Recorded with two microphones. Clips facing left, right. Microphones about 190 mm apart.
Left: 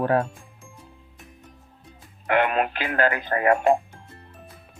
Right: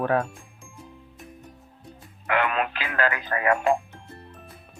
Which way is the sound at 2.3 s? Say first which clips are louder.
Left 3 dB; 45° left (ahead or behind).